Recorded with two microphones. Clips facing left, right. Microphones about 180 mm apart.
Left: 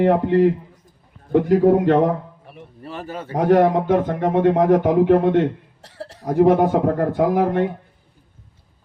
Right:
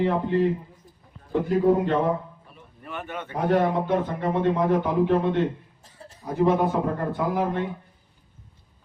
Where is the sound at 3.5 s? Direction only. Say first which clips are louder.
Left 7 dB; 80° left.